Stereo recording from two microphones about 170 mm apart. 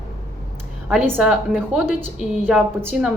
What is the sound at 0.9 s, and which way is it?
A woman's voice, centre (ahead or behind).